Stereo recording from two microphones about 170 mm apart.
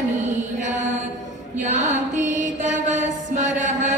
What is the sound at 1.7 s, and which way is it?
Mantra, 45° right (ahead or behind).